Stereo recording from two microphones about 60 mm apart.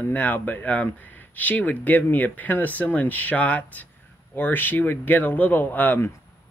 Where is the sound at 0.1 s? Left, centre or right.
Left.